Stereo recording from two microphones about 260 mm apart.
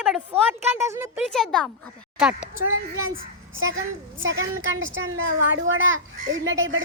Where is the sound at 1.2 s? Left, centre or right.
Centre.